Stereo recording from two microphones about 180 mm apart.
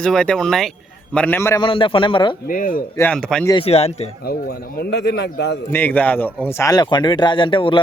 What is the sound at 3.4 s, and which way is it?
Speech, 30° left (ahead or behind).